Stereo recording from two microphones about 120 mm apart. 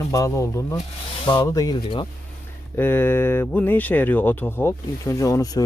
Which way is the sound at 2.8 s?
20° left (ahead or behind).